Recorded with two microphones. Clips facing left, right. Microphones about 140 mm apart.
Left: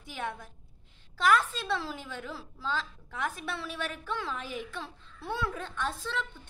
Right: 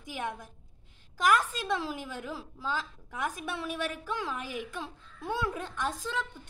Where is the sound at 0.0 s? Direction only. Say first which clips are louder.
Right 1 dB; 15° right (ahead or behind).